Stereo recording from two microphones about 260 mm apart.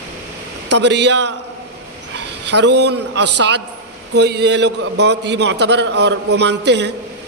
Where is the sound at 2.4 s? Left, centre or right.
Right.